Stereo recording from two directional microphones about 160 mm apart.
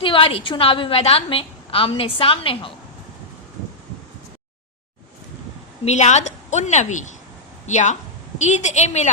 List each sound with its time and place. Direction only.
0.0 s a woman's voice: 35° left (ahead or behind)
5.8 s a woman's voice: 45° left (ahead or behind)